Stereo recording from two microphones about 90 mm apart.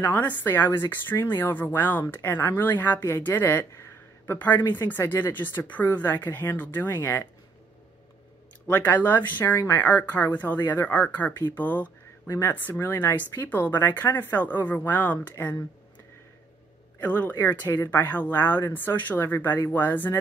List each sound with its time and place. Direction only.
0.0 s speech: 20° left (ahead or behind)
8.7 s speech: 20° left (ahead or behind)
17.0 s speech: 20° left (ahead or behind)